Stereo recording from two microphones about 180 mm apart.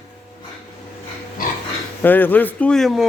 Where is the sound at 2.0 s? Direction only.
10° left (ahead or behind).